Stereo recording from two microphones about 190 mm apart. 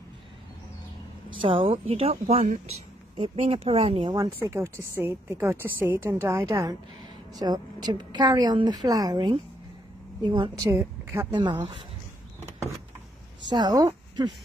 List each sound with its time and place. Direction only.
1.4 s a woman's voice: 30° right (ahead or behind)
10.7 s speech: 15° right (ahead or behind)
11.3 s speech: 25° right (ahead or behind)
13.5 s speech: 20° right (ahead or behind)